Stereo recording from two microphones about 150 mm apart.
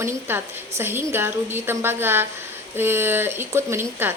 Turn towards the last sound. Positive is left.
turn(degrees=-15)  # may be behind; listen again after turning